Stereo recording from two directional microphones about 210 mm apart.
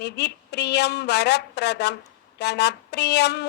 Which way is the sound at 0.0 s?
55° left (ahead or behind).